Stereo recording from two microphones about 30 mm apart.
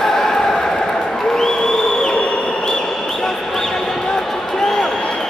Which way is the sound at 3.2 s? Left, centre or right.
Centre.